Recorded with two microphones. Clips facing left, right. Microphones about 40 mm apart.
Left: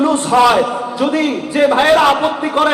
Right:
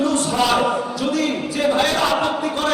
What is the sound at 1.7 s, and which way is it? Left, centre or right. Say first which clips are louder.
Speech: left 7 dB; left.